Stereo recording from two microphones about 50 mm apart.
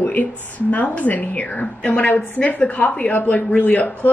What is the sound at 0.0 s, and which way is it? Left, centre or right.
A woman's voice, left.